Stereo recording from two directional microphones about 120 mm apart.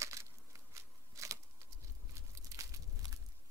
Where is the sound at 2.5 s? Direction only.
25° right (ahead or behind).